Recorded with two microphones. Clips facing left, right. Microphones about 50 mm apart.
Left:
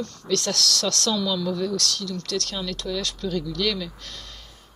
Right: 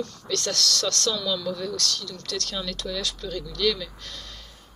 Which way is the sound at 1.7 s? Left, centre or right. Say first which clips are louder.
Left 3 dB; left.